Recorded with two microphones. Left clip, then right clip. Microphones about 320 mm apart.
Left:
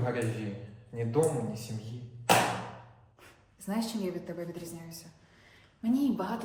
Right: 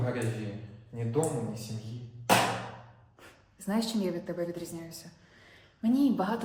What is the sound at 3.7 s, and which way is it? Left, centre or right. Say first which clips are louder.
Speech: right 3 dB; right.